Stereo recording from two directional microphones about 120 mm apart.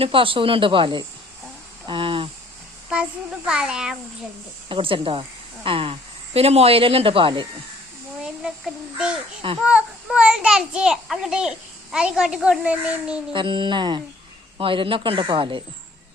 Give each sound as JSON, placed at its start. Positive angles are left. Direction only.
{"t": 0.0, "sound": "speech", "side_deg": -45}
{"t": 2.9, "sound": "a child's voice", "side_deg": -5}
{"t": 4.7, "sound": "speech", "side_deg": -45}
{"t": 8.2, "sound": "a child's voice", "side_deg": -5}
{"t": 13.3, "sound": "speech", "side_deg": -40}